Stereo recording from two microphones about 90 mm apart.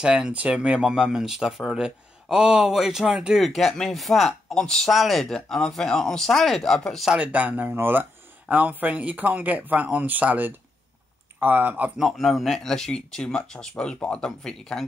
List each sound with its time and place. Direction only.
0.0 s speech: 10° right (ahead or behind)
7.1 s speech: 15° right (ahead or behind)
12.0 s speech: centre (ahead or behind)